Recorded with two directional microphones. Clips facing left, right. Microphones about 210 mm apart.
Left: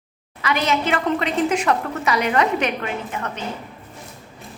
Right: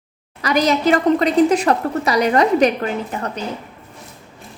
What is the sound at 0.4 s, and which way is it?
A woman's voice, 40° right (ahead or behind).